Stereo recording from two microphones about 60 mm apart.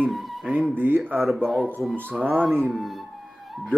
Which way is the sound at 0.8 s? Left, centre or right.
Right.